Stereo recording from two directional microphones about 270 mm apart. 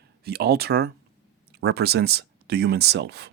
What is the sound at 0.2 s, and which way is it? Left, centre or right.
Speech, right.